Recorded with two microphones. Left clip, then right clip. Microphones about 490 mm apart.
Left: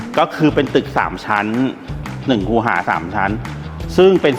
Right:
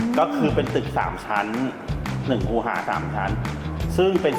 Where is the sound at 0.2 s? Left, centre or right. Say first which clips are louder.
Left 7 dB; left.